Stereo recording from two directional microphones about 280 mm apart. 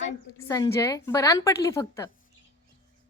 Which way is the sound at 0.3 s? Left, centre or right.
Centre.